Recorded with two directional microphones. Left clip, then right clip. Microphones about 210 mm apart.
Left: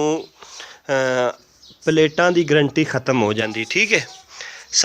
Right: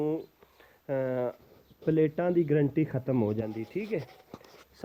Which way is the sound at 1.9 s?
10° left (ahead or behind).